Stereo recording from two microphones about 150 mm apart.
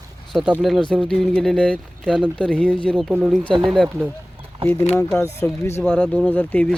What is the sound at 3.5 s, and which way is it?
Speech, 35° right (ahead or behind).